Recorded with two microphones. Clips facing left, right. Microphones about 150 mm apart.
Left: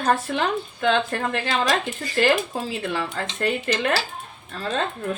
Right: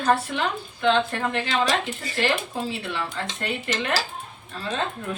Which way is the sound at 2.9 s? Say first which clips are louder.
Left 3 dB; 40° left (ahead or behind).